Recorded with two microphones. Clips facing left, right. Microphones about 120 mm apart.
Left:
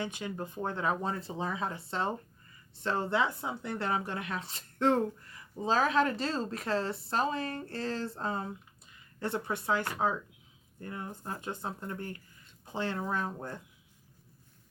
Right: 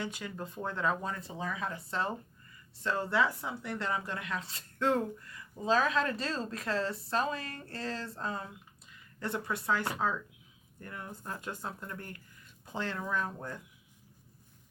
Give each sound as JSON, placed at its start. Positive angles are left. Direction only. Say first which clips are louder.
{"t": 0.0, "sound": "speech", "louder": "left 2 dB", "side_deg": 20}
{"t": 10.8, "sound": "speech", "louder": "left 3 dB", "side_deg": 25}